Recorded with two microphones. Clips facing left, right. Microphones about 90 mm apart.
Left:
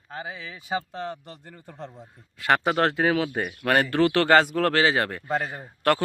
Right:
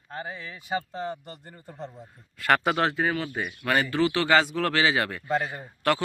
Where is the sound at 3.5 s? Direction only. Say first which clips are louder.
Left 1 dB; 55° left (ahead or behind).